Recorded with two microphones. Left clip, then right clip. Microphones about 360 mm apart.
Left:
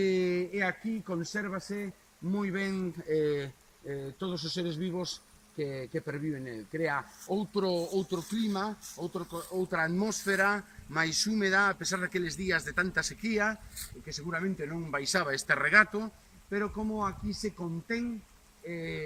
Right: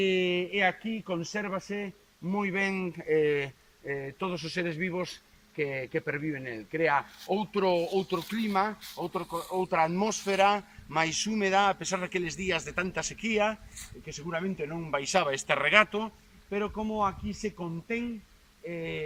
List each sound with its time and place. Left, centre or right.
0.0 s a man's voice: centre
3.1 s speech: right
3.8 s speech: right
9.7 s a man's voice: centre
18.6 s a man's voice: centre